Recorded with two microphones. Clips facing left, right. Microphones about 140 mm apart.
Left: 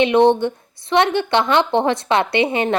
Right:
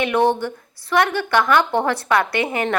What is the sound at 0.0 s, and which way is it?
A woman's voice, 20° left (ahead or behind).